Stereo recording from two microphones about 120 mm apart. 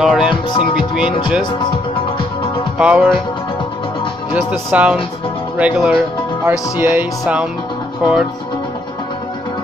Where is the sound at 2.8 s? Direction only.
10° right (ahead or behind).